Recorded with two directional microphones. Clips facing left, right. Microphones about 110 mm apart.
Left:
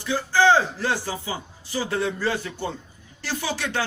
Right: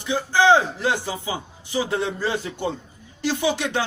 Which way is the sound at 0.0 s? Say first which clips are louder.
Right 1 dB; 20° right (ahead or behind).